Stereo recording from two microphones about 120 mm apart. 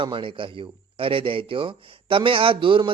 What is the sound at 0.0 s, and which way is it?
Speech, 45° right (ahead or behind).